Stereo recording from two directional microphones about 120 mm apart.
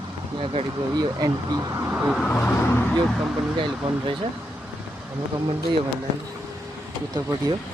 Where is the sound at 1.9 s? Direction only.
10° right (ahead or behind).